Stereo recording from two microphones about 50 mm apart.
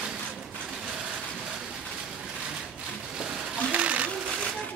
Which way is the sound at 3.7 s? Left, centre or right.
Right.